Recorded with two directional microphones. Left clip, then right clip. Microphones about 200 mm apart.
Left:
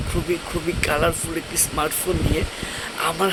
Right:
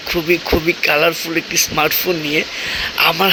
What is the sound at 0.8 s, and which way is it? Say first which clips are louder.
Speech: right 5 dB; 20° right (ahead or behind).